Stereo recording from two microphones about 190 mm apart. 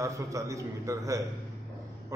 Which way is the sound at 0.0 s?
15° right (ahead or behind).